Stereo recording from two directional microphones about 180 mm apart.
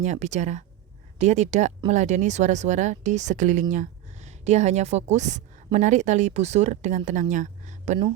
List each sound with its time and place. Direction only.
0.0 s speech: 40° right (ahead or behind)